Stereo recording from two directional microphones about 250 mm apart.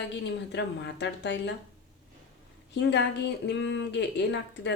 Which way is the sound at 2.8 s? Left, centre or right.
Left.